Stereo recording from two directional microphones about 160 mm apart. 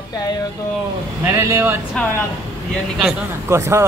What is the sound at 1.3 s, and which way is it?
Speech, 20° right (ahead or behind).